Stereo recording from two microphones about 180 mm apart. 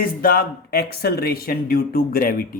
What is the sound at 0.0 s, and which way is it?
Speech, 55° left (ahead or behind).